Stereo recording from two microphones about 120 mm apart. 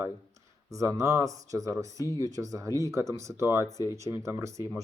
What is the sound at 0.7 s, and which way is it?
Speech, 25° right (ahead or behind).